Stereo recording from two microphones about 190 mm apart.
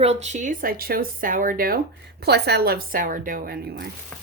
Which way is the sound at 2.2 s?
60° right (ahead or behind).